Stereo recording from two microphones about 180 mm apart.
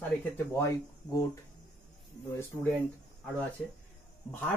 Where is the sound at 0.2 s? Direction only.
15° left (ahead or behind).